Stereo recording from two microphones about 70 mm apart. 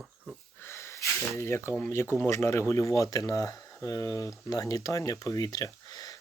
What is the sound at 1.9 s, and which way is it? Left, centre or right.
Speech, left.